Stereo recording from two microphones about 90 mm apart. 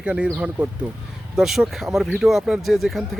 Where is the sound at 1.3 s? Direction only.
5° right (ahead or behind).